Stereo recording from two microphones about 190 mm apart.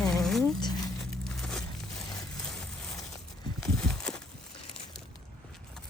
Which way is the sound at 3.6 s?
5° left (ahead or behind).